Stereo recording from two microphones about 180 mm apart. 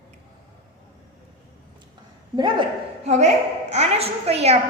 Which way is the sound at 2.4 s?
25° right (ahead or behind).